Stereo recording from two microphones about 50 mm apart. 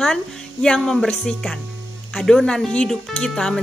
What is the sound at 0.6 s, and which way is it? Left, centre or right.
A woman's voice, centre.